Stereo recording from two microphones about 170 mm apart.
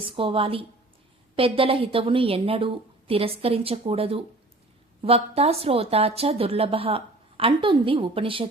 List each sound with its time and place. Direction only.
0.0 s a woman's voice: 30° right (ahead or behind)